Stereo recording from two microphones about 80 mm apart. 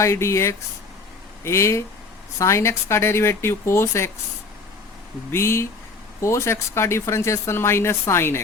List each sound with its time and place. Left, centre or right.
0.0 s speech: left
5.3 s speech: left